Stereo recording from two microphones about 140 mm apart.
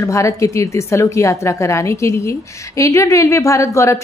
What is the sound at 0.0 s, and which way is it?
A woman's voice, 20° left (ahead or behind).